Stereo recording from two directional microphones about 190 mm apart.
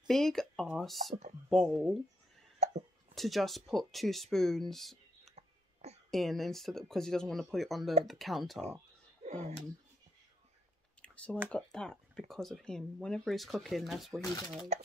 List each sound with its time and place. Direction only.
0.1 s speech: centre (ahead or behind)
2.6 s a sound: 35° right (ahead or behind)
3.2 s speech: centre (ahead or behind)
5.3 s clicking: 35° right (ahead or behind)
6.0 s speech: centre (ahead or behind)
9.2 s speech: 40° right (ahead or behind)
11.0 s a sound: 5° left (ahead or behind)
11.5 s speech: 5° left (ahead or behind)
14.7 s speech: 35° right (ahead or behind)